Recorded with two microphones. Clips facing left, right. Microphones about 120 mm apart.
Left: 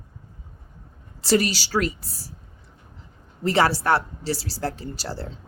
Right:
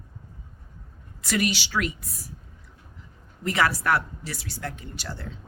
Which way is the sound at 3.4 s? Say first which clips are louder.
Left 4 dB; 30° left (ahead or behind).